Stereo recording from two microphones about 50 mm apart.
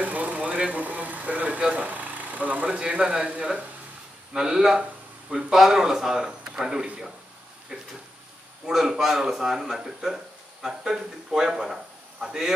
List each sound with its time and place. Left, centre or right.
0.0 s vehicle: right
1.6 s speech: right
2.7 s a man's voice: centre
4.3 s a man's voice: centre